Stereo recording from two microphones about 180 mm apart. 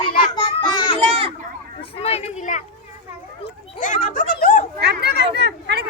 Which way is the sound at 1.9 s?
35° left (ahead or behind).